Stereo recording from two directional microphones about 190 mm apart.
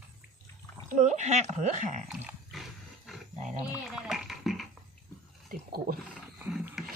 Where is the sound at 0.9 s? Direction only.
40° right (ahead or behind).